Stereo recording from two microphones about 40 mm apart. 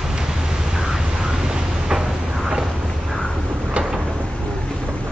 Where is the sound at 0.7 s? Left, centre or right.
Centre.